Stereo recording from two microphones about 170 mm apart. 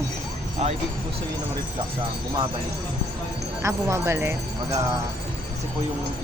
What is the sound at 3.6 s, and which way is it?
Speech, 15° right (ahead or behind).